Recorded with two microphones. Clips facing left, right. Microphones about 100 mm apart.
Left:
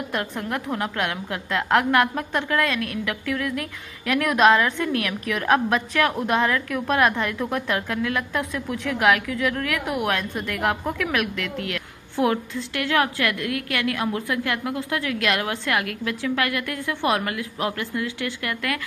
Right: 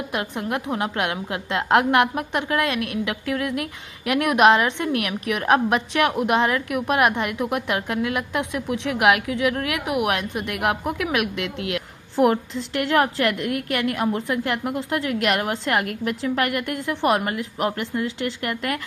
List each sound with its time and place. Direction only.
0.1 s a woman's voice: 20° right (ahead or behind)